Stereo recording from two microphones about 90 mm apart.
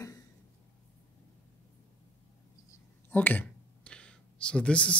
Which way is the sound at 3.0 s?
20° left (ahead or behind).